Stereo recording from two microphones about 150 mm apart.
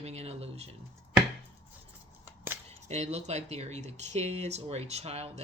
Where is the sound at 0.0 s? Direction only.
45° right (ahead or behind).